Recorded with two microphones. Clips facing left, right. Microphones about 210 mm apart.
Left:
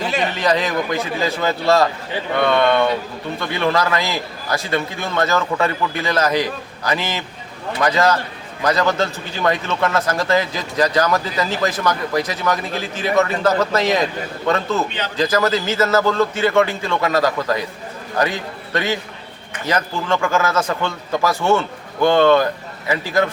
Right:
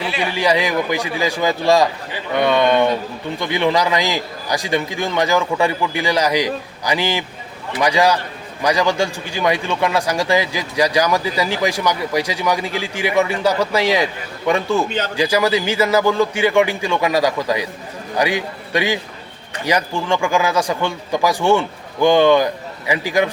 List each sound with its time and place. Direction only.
0.2 s a man's voice: 10° right (ahead or behind)